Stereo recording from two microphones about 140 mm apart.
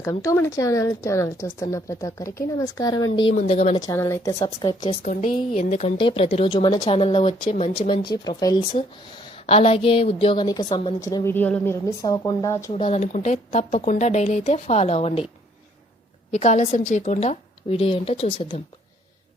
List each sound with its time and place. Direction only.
0.0 s a woman's voice: 20° left (ahead or behind)
3.4 s a woman's voice: 45° left (ahead or behind)
3.8 s a woman's voice: 25° left (ahead or behind)
5.5 s a woman's voice: 50° left (ahead or behind)
6.0 s a woman's voice: 40° left (ahead or behind)
6.7 s a woman's voice: 30° left (ahead or behind)
6.9 s a woman's voice: 40° left (ahead or behind)
9.3 s a woman's voice: 45° left (ahead or behind)
11.0 s a woman's voice: 20° left (ahead or behind)
12.7 s a woman's voice: 40° left (ahead or behind)
13.0 s a woman's voice: 60° left (ahead or behind)
16.3 s a woman's voice: 55° left (ahead or behind)